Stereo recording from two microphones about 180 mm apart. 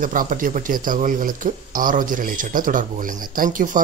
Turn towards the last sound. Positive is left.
turn(degrees=-50)  # may be behind; listen again after turning